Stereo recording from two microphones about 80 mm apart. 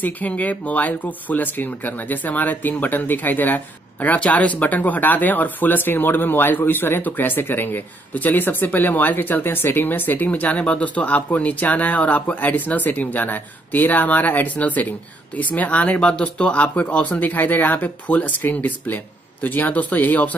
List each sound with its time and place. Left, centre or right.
0.0 s speech: centre